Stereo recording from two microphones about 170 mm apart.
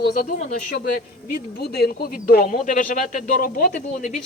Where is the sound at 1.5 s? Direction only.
65° left (ahead or behind).